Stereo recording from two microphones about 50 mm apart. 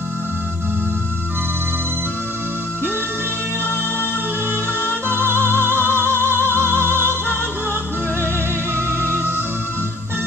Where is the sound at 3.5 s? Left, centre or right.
Left.